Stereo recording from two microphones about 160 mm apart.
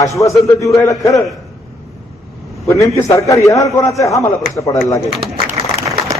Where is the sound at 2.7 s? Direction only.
20° left (ahead or behind).